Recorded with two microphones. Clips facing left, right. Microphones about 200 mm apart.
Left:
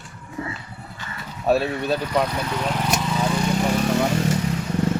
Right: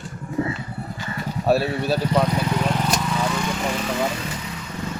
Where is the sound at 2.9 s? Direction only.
5° left (ahead or behind).